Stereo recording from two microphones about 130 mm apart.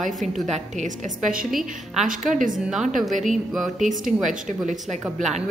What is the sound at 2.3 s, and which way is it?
Speech, 90° right.